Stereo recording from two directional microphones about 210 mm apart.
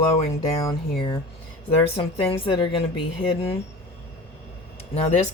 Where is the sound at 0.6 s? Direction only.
20° left (ahead or behind).